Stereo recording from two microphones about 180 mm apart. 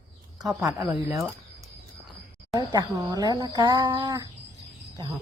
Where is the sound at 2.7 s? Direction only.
20° right (ahead or behind).